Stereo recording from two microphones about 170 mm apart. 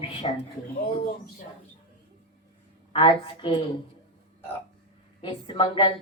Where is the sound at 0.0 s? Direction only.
35° left (ahead or behind).